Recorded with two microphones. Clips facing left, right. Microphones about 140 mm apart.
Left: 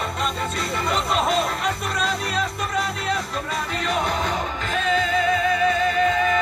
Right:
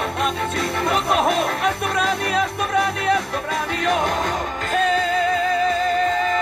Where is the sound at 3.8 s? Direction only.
45° right (ahead or behind).